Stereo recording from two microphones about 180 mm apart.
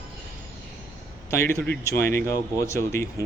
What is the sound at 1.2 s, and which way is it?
Speech, 15° left (ahead or behind).